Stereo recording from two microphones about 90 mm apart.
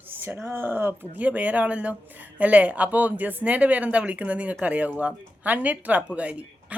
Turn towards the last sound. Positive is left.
turn(degrees=-15)  # may be behind; listen again after turning